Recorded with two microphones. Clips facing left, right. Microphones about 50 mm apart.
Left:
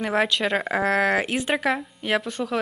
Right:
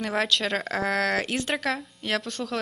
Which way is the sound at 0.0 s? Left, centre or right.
Centre.